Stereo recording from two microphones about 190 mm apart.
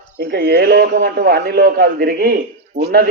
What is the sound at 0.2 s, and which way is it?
A man's voice, 55° right (ahead or behind).